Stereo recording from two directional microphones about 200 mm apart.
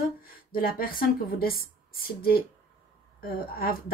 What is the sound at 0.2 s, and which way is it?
A woman's voice, 45° left (ahead or behind).